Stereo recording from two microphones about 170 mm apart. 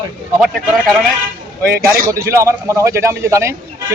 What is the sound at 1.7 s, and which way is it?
Speech, 60° right (ahead or behind).